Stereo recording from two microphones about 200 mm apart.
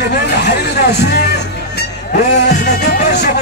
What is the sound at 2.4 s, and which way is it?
Speech, 55° left (ahead or behind).